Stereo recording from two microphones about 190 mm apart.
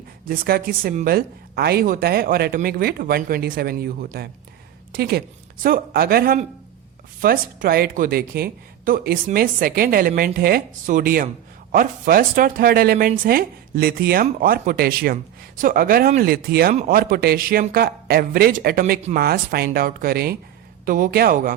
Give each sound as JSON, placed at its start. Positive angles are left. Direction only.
{"t": 0.3, "sound": "a woman's voice", "side_deg": -50}